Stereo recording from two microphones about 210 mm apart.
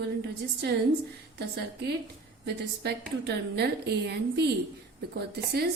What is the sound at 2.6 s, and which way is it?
A woman's voice, 50° right (ahead or behind).